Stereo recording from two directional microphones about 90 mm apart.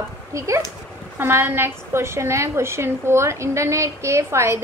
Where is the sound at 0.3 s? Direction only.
35° right (ahead or behind).